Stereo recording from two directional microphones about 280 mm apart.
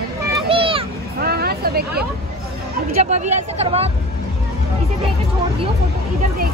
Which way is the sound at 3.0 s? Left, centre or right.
Right.